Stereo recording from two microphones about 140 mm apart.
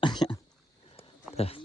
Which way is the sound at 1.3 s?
45° left (ahead or behind).